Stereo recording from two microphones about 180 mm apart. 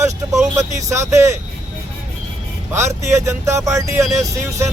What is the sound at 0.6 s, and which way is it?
Speech, 15° right (ahead or behind).